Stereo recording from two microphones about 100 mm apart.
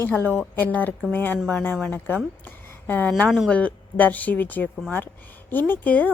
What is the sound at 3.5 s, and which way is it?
A woman's voice, 15° left (ahead or behind).